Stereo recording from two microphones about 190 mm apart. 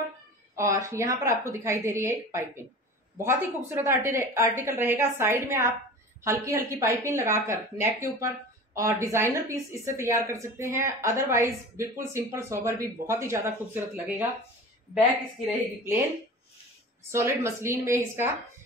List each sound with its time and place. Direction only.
0.6 s speech: 15° right (ahead or behind)
15.4 s speech: 10° right (ahead or behind)
17.1 s speech: 15° right (ahead or behind)